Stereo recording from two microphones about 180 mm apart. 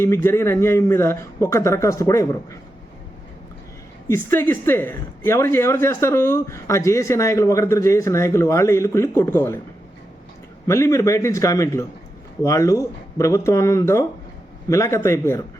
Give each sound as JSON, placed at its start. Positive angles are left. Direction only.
{"t": 0.0, "sound": "speech", "side_deg": 15}
{"t": 4.1, "sound": "speech", "side_deg": 15}
{"t": 10.7, "sound": "speech", "side_deg": 15}